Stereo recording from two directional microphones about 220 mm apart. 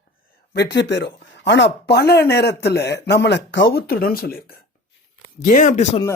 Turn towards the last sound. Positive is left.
turn(degrees=35)  # may be behind; listen again after turning